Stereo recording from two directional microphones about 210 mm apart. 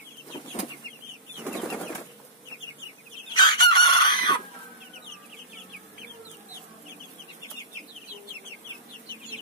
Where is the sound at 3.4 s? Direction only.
20° left (ahead or behind).